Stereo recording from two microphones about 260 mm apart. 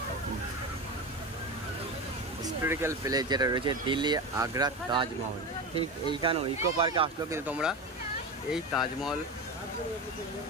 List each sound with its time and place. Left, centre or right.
2.4 s speech: centre